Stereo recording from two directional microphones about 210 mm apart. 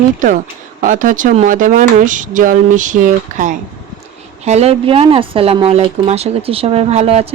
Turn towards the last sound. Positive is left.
turn(degrees=-30)  # may be behind; listen again after turning